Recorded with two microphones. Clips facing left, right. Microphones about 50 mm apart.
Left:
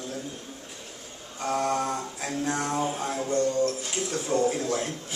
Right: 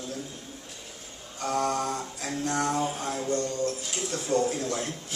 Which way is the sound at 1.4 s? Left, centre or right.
Centre.